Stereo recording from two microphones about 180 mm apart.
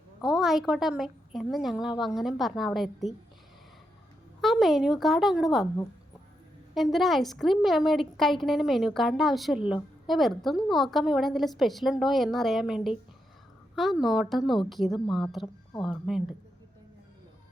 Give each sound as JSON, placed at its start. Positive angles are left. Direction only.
{"t": 0.2, "sound": "a woman's voice", "side_deg": 0}
{"t": 4.4, "sound": "a woman's voice", "side_deg": 0}
{"t": 6.7, "sound": "a woman's voice", "side_deg": 0}